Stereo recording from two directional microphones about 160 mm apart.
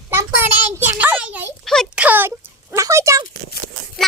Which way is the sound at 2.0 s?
10° right (ahead or behind).